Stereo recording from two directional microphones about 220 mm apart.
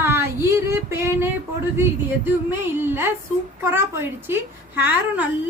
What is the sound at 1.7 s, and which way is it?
A woman's voice, 10° right (ahead or behind).